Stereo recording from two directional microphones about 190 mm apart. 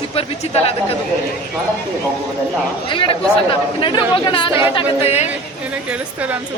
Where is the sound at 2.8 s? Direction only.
25° left (ahead or behind).